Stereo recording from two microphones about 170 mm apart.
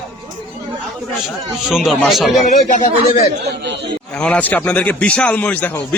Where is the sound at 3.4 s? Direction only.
85° right.